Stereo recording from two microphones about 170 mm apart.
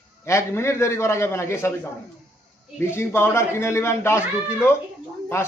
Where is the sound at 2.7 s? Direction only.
15° left (ahead or behind).